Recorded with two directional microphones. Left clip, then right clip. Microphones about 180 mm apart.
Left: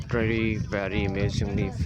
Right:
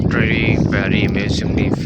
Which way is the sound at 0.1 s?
5° right (ahead or behind).